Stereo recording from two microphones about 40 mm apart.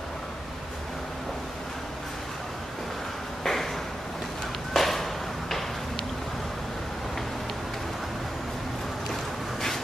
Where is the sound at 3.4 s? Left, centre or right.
Centre.